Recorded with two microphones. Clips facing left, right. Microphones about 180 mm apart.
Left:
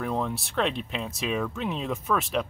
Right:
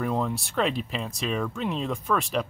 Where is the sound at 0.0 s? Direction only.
Centre (ahead or behind).